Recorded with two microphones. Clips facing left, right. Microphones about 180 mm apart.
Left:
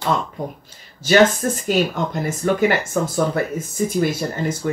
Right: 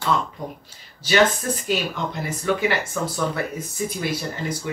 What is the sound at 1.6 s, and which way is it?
Speech, 45° left (ahead or behind).